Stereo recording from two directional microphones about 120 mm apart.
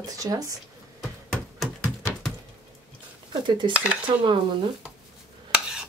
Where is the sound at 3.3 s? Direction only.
40° right (ahead or behind).